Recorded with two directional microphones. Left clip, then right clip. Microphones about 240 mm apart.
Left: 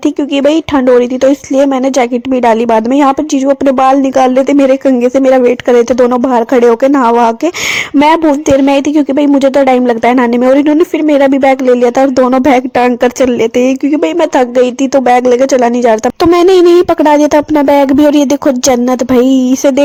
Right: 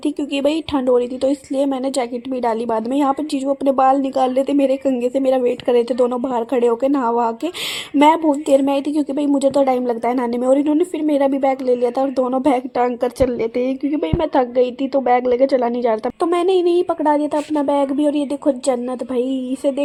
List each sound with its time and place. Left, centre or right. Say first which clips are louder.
0.4 s a woman's voice: left 9 dB; left